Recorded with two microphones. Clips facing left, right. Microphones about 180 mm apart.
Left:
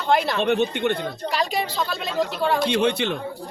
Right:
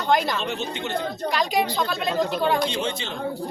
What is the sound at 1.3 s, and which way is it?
A woman's voice, 5° left (ahead or behind).